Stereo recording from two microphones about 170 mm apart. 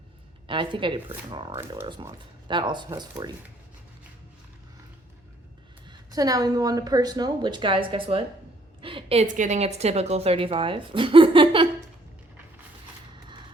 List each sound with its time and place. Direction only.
0.4 s a woman's voice: 30° right (ahead or behind)
5.9 s a woman's voice: 20° right (ahead or behind)
9.2 s speech: 45° right (ahead or behind); by 11.7 s 30° right (ahead or behind)